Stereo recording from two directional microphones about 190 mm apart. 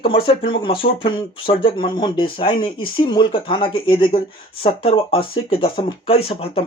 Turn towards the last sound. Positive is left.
turn(degrees=30)  # may be behind; listen again after turning